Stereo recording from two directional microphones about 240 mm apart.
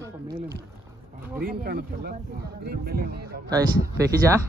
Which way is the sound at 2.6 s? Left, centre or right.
Right.